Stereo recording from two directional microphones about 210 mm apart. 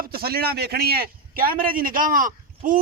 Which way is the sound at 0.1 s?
45° right (ahead or behind).